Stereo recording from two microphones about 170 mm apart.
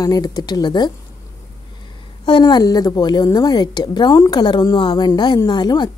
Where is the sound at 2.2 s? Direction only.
25° left (ahead or behind).